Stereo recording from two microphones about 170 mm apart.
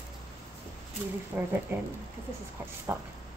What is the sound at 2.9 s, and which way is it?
Speech, 15° right (ahead or behind).